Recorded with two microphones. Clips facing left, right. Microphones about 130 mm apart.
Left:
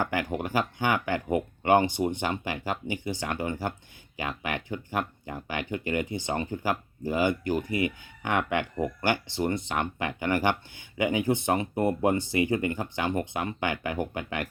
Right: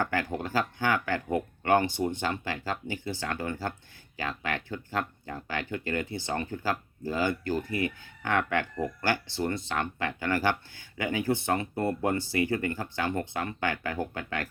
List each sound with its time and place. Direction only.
0.0 s speech: 15° left (ahead or behind)